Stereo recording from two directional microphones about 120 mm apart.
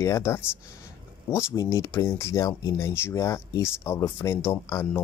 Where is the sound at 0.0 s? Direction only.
25° left (ahead or behind).